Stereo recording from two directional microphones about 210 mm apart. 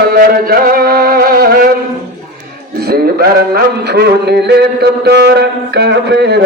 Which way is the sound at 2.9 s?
45° right (ahead or behind).